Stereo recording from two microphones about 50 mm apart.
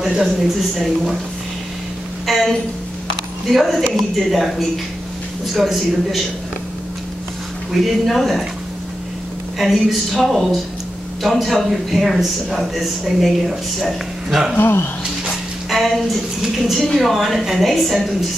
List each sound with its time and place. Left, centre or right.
0.0 s a man's voice: centre
2.2 s a sound: centre
3.4 s a man's voice: centre
7.7 s a man's voice: centre
9.6 s a man's voice: centre
14.6 s speech: left
15.7 s a sound: centre
16.4 s a man's voice: centre